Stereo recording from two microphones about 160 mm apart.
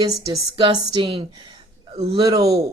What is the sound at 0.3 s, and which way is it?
A woman's voice, 30° right (ahead or behind).